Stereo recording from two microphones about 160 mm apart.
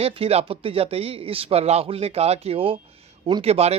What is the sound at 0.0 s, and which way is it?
Speech, 35° right (ahead or behind).